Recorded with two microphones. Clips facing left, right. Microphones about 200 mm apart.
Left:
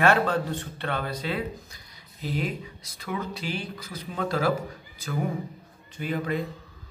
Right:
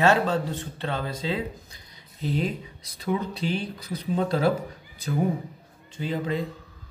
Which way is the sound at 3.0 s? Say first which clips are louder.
Right 5 dB; 35° right (ahead or behind).